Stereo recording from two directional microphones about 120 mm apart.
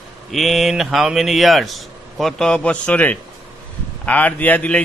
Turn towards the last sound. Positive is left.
turn(degrees=10)  # may be behind; listen again after turning